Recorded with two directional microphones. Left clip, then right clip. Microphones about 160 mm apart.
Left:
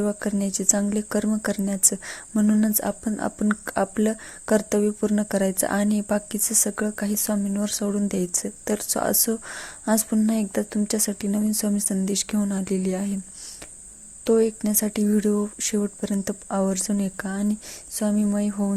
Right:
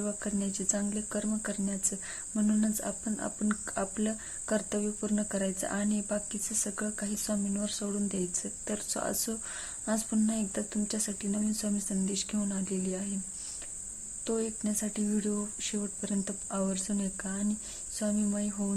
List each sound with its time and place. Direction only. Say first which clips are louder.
0.0 s speech: left 9 dB; 35° left (ahead or behind)
14.3 s speech: left 13 dB; 40° left (ahead or behind)